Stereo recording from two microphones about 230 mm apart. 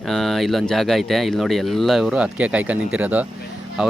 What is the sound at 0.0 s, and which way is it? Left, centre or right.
Speech, centre.